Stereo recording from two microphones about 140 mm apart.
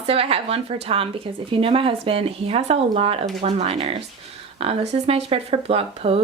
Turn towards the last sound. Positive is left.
turn(degrees=-45)  # may be behind; listen again after turning